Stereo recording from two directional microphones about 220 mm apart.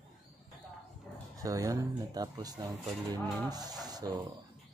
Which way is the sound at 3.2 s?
10° left (ahead or behind).